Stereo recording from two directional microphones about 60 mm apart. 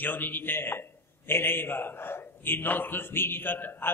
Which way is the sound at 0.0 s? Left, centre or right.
Left.